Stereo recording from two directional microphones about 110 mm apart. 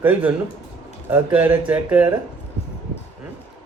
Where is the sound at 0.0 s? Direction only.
15° right (ahead or behind).